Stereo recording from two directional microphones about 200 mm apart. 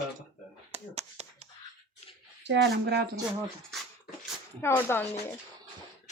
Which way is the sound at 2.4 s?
60° right (ahead or behind).